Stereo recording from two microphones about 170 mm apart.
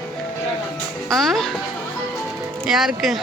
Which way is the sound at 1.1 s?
Centre (ahead or behind).